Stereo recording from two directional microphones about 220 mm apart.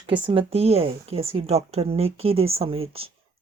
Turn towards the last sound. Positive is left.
turn(degrees=-25)  # may be behind; listen again after turning